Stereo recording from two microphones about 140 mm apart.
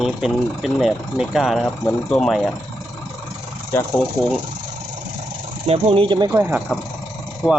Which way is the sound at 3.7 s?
15° left (ahead or behind).